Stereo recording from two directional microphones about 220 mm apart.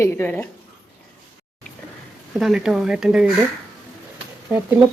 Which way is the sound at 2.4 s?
Centre (ahead or behind).